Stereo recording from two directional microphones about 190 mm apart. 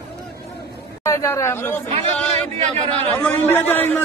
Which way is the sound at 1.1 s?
15° left (ahead or behind).